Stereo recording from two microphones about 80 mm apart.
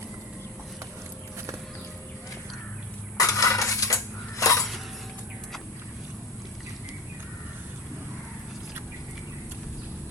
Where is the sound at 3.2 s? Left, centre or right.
Left.